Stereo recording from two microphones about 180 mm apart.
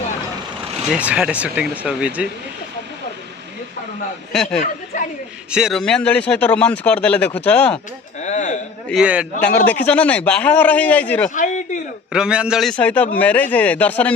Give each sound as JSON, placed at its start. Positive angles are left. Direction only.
{"t": 0.9, "sound": "speech", "side_deg": -5}
{"t": 4.3, "sound": "a man's voice", "side_deg": 5}
{"t": 8.2, "sound": "a sound", "side_deg": 40}
{"t": 8.9, "sound": "a man's voice", "side_deg": -5}
{"t": 9.4, "sound": "speech", "side_deg": 10}
{"t": 11.3, "sound": "a sound", "side_deg": 45}
{"t": 12.1, "sound": "a man's voice", "side_deg": -5}